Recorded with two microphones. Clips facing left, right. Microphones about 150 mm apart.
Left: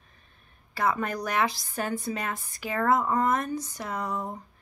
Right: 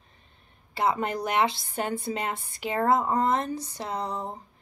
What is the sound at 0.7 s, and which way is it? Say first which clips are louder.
A woman's voice: right 1 dB; 25° right (ahead or behind).